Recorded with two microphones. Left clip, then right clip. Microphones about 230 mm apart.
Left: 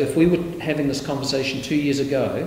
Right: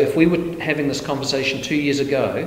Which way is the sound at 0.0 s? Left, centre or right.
Centre.